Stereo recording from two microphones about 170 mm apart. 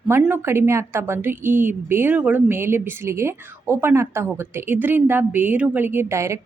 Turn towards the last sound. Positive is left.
turn(degrees=-15)  # may be behind; listen again after turning